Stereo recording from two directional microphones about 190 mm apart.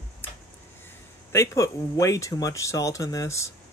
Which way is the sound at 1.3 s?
15° left (ahead or behind).